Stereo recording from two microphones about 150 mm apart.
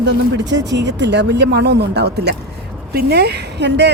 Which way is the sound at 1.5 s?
90° right.